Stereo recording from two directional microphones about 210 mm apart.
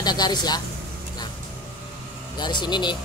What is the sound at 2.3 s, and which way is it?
Speech, 20° left (ahead or behind).